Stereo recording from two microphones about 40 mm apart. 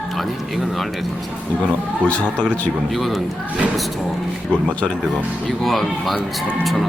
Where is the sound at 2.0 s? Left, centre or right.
Left.